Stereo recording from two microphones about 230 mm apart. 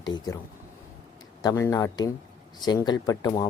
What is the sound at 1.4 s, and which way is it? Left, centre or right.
Speech, centre.